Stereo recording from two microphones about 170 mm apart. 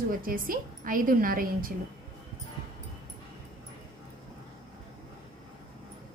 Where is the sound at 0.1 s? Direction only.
55° right (ahead or behind).